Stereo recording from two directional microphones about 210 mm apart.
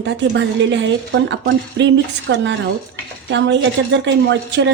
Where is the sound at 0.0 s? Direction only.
60° right (ahead or behind).